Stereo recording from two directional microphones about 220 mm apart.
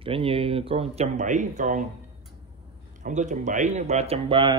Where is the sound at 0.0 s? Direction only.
25° right (ahead or behind).